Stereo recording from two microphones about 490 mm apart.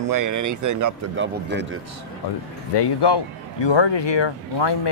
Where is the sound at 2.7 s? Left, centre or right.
Left.